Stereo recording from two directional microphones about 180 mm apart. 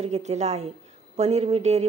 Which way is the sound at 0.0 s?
35° right (ahead or behind).